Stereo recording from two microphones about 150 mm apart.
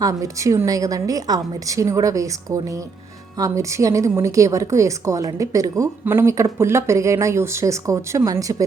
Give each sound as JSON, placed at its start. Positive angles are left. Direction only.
{"t": 0.0, "sound": "a woman's voice", "side_deg": -20}